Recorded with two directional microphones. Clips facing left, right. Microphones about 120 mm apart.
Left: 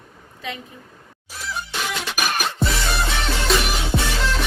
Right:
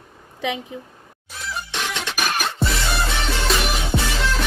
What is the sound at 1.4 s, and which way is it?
Music, centre (ahead or behind).